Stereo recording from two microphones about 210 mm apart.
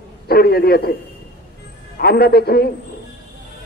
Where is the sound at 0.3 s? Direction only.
50° left (ahead or behind).